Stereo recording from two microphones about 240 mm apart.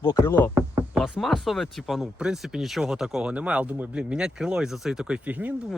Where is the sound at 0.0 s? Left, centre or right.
Centre.